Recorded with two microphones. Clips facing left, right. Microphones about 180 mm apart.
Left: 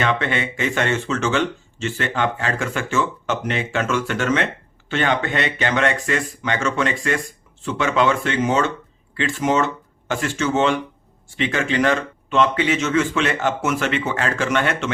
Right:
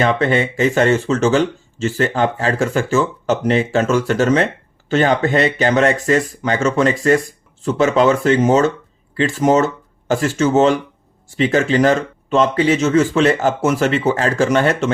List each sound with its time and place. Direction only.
0.0 s speech: 35° right (ahead or behind)